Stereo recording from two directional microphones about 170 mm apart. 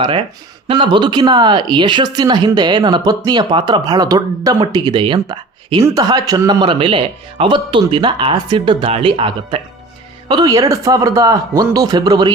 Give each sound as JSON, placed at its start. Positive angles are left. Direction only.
{"t": 0.0, "sound": "speech", "side_deg": -30}